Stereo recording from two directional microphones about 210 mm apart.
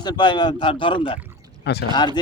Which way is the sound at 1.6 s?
55° left (ahead or behind).